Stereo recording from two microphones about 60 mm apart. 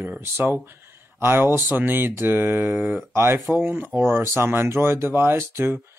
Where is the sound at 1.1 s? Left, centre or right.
Right.